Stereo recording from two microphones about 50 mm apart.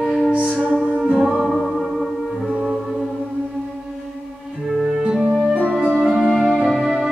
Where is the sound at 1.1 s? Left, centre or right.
Centre.